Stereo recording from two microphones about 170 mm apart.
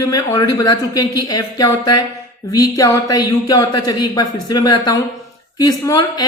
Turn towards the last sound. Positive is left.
turn(degrees=20)  # may be behind; listen again after turning